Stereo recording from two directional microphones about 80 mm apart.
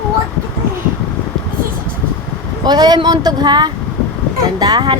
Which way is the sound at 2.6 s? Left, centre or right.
Right.